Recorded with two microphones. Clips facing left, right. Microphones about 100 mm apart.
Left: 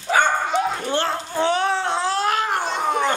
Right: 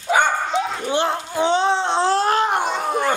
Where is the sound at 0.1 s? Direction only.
15° right (ahead or behind).